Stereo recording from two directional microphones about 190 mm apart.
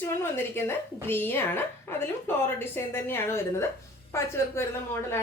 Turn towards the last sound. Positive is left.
turn(degrees=15)  # may be behind; listen again after turning